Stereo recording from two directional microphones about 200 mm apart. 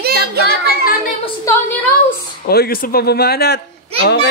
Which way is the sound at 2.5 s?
50° left (ahead or behind).